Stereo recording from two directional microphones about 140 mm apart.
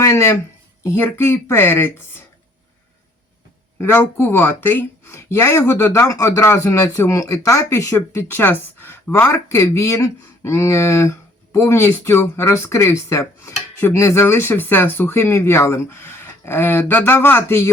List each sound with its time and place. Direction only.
0.0 s speech: 20° left (ahead or behind)
3.8 s speech: 15° left (ahead or behind)